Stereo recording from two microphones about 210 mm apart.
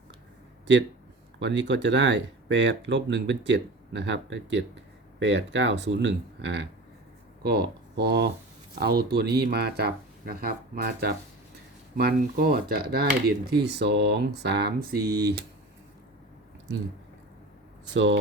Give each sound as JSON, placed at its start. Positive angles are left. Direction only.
{"t": 1.4, "sound": "speech", "side_deg": -55}
{"t": 17.9, "sound": "speech", "side_deg": -55}